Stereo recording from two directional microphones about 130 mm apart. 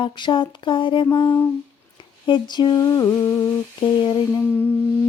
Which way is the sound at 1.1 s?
35° left (ahead or behind).